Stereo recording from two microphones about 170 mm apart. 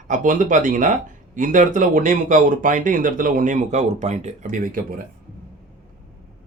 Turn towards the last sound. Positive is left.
turn(degrees=-55)  # may be behind; listen again after turning